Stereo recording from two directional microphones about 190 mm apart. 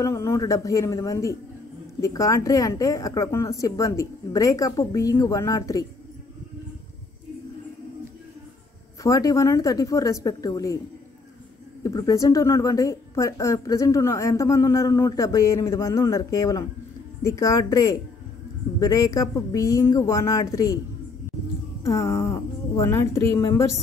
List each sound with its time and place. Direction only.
0.0 s a woman's voice: 15° left (ahead or behind)
9.0 s a woman's voice: 15° left (ahead or behind)
11.8 s a woman's voice: 20° left (ahead or behind)
21.8 s a woman's voice: 15° left (ahead or behind)